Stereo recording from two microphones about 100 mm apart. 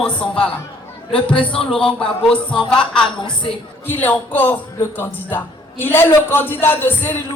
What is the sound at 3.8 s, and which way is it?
A man's voice, 20° left (ahead or behind).